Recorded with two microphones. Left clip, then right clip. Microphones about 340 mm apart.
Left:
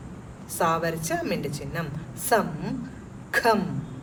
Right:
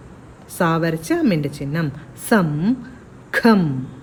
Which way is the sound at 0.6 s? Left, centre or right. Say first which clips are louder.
Right 5 dB; right.